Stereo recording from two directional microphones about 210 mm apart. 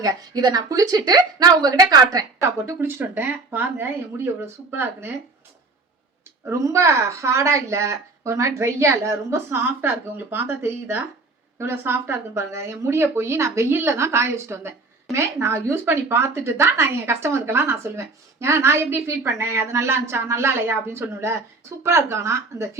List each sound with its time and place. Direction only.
0.0 s a woman's voice: 15° right (ahead or behind)
6.4 s a woman's voice: 15° right (ahead or behind)